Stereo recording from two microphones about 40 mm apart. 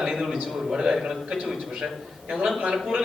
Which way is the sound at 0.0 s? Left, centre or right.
Centre.